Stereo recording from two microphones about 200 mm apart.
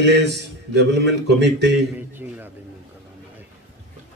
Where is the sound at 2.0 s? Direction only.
10° right (ahead or behind).